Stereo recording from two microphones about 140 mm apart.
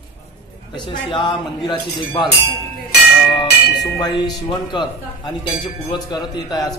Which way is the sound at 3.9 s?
30° left (ahead or behind).